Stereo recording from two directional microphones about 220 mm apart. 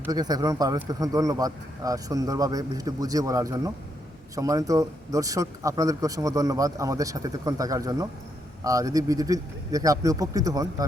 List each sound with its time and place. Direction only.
0.0 s speech: 15° right (ahead or behind)